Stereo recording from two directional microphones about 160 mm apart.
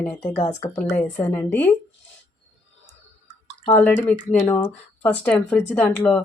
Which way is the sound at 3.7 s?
10° left (ahead or behind).